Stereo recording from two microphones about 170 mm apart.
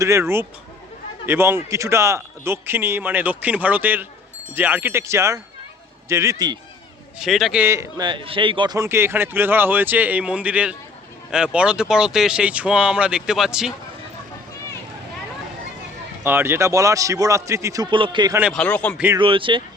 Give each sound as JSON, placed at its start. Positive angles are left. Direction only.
{"t": 0.0, "sound": "a man's voice", "side_deg": -15}
{"t": 7.2, "sound": "speech", "side_deg": 0}
{"t": 7.6, "sound": "a man's voice", "side_deg": -15}
{"t": 16.2, "sound": "a man's voice", "side_deg": -15}
{"t": 17.9, "sound": "a man's voice", "side_deg": -30}
{"t": 18.5, "sound": "a man's voice", "side_deg": 5}
{"t": 18.9, "sound": "a man's voice", "side_deg": -10}
{"t": 19.2, "sound": "speech", "side_deg": -30}